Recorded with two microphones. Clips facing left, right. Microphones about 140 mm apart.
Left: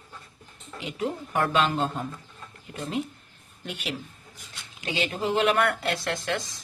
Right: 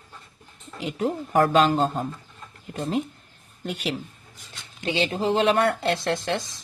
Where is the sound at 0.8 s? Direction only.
40° right (ahead or behind).